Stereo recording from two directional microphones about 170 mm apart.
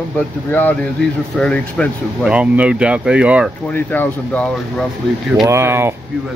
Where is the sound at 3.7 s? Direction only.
10° left (ahead or behind).